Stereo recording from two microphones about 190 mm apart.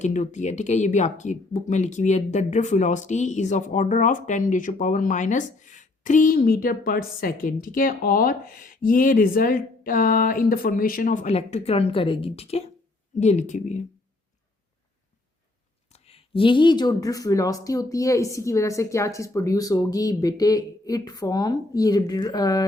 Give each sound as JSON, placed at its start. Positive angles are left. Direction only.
{"t": 0.0, "sound": "speech", "side_deg": 40}
{"t": 15.9, "sound": "speech", "side_deg": 30}